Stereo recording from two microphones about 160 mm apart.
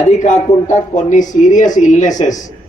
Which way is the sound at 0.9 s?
50° left (ahead or behind).